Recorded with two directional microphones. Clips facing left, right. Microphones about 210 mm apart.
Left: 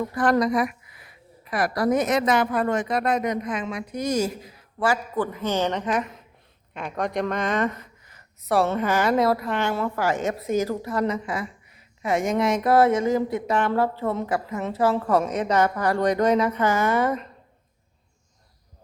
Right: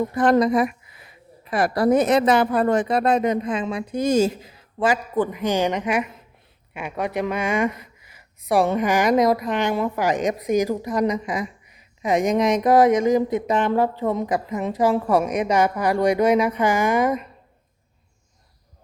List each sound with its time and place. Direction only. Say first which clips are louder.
0.0 s speech: right 4 dB; 20° right (ahead or behind)